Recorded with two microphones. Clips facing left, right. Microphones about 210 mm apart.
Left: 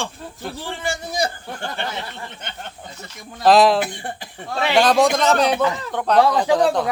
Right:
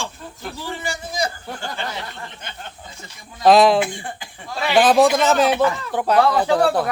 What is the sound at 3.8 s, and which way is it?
Speech, 40° left (ahead or behind).